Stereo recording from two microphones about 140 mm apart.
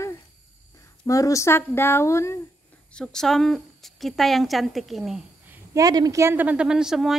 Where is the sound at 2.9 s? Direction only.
5° left (ahead or behind).